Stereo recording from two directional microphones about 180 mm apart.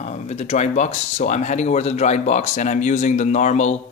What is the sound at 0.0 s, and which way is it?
Speech, 40° left (ahead or behind).